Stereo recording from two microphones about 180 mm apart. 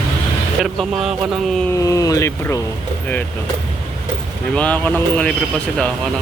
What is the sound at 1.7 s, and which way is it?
Speech, 20° left (ahead or behind).